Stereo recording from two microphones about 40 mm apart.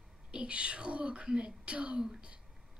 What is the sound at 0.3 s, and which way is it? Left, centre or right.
Speech, right.